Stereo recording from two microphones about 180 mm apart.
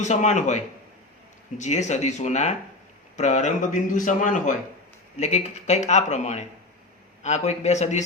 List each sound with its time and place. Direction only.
0.0 s speech: 40° left (ahead or behind)